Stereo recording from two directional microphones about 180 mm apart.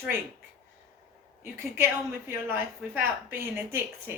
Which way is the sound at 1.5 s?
15° right (ahead or behind).